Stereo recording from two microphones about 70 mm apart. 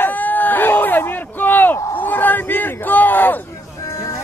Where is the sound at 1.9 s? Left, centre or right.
Left.